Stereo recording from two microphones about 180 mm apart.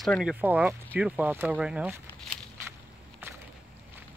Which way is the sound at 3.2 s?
10° right (ahead or behind).